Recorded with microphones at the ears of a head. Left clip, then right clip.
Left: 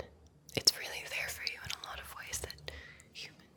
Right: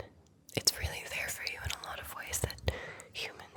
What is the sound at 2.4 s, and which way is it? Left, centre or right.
Whispering, right.